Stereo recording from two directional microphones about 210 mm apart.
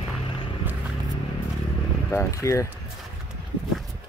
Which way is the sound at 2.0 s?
15° left (ahead or behind).